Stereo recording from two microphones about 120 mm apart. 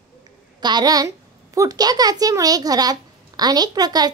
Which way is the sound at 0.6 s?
35° right (ahead or behind).